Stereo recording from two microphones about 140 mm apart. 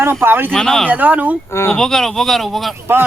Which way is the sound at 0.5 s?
5° left (ahead or behind).